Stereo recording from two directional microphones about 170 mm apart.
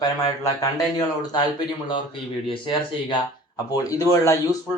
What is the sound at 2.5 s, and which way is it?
Speech, 30° left (ahead or behind).